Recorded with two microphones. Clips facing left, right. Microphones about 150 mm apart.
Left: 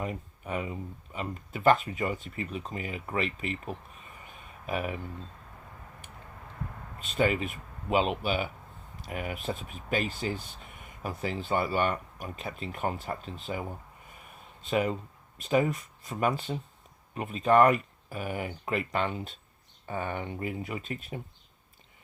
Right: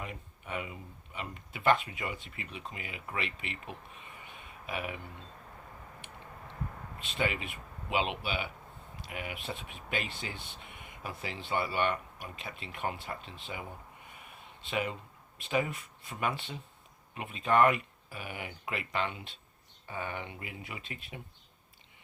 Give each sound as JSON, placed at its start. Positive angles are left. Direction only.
{"t": 0.0, "sound": "speech", "side_deg": 40}
{"t": 7.1, "sound": "speech", "side_deg": 40}
{"t": 14.1, "sound": "a sound", "side_deg": 40}
{"t": 15.4, "sound": "speech", "side_deg": 40}